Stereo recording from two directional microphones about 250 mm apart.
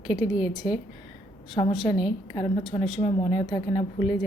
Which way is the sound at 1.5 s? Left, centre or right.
Centre.